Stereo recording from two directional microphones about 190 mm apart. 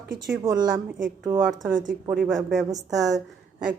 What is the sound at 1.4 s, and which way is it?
A woman's voice, 10° right (ahead or behind).